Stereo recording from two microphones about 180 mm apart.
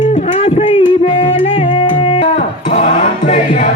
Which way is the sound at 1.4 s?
35° left (ahead or behind).